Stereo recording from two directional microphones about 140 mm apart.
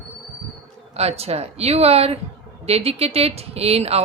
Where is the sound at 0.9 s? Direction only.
45° right (ahead or behind).